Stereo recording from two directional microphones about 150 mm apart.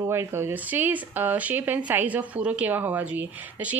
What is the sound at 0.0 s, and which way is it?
Speech, 15° right (ahead or behind).